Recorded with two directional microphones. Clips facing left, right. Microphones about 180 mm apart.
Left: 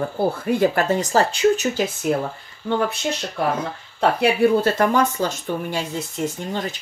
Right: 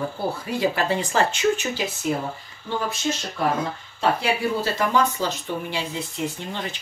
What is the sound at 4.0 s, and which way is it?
Speech, 55° left (ahead or behind).